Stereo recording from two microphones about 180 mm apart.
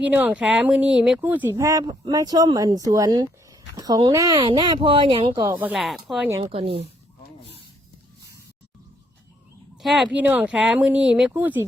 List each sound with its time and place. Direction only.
0.0 s speech: 10° right (ahead or behind); by 5.5 s 25° right (ahead or behind)
5.7 s speech: centre (ahead or behind)
6.4 s speech: 35° right (ahead or behind)
9.8 s speech: centre (ahead or behind)